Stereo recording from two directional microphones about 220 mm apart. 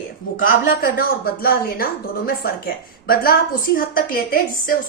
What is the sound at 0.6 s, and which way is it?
Speech, 40° left (ahead or behind).